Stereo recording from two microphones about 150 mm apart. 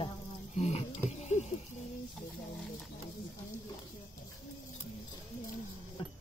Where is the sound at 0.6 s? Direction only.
45° left (ahead or behind).